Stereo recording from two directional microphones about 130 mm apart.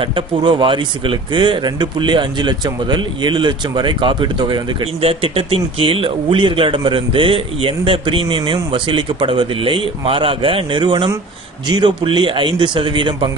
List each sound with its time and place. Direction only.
0.0 s speech: 40° right (ahead or behind)